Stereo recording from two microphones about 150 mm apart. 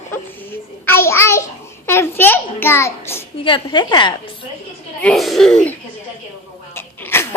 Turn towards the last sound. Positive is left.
turn(degrees=15)  # may be behind; listen again after turning